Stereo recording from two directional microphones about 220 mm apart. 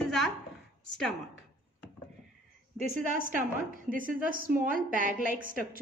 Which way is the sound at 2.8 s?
35° right (ahead or behind).